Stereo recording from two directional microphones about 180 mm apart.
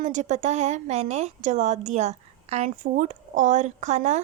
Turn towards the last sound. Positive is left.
turn(degrees=-40)  # may be behind; listen again after turning